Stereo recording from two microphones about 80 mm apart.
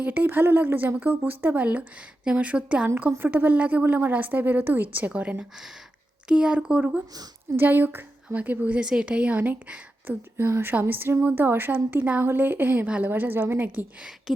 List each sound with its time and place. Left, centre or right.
0.0 s a woman's voice: right
10.3 s a woman's voice: right